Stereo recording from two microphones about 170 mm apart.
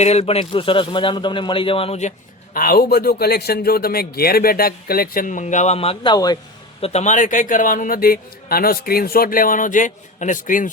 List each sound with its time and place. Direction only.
0.0 s a man's voice: 40° left (ahead or behind)
6.8 s a man's voice: 40° left (ahead or behind)